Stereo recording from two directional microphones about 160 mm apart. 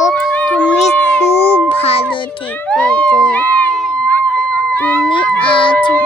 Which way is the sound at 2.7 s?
5° left (ahead or behind).